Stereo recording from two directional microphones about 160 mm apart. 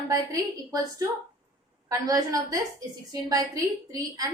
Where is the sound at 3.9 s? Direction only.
20° right (ahead or behind).